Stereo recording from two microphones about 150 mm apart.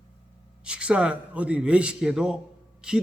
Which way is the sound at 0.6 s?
5° right (ahead or behind).